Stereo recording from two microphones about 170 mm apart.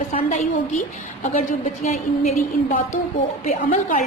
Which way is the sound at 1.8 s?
40° left (ahead or behind).